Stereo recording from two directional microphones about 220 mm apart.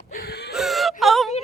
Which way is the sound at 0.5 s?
Centre (ahead or behind).